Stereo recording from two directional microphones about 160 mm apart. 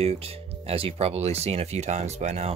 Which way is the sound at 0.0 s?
40° right (ahead or behind).